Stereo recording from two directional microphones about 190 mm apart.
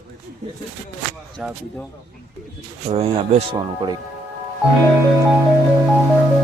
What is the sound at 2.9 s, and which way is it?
Speech, 30° right (ahead or behind).